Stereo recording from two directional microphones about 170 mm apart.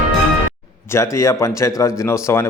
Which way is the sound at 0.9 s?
15° left (ahead or behind).